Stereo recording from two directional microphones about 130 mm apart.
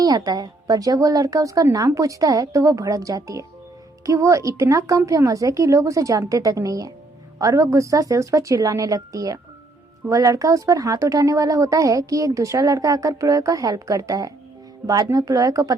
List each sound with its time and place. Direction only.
0.0 s a woman's voice: 30° right (ahead or behind)